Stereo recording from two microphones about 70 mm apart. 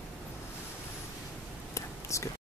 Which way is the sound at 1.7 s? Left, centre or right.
Left.